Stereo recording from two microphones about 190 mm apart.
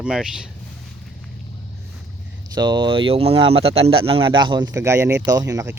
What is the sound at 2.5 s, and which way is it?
Speech, 25° right (ahead or behind).